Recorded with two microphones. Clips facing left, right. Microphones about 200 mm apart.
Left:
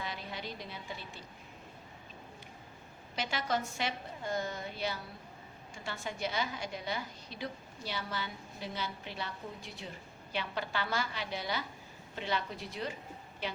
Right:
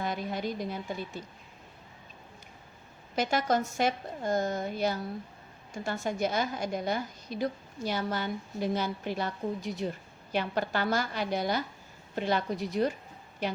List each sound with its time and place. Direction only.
0.0 s a woman's voice: 45° right (ahead or behind)
3.2 s a woman's voice: 45° right (ahead or behind)